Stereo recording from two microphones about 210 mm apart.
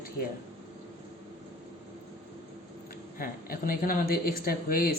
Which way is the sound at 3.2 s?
45° left (ahead or behind).